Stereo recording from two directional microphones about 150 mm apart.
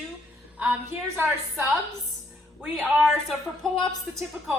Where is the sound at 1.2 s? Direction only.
15° right (ahead or behind).